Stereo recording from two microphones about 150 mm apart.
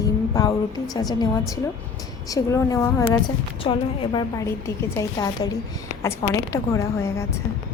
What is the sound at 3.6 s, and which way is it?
A woman's voice, 35° left (ahead or behind).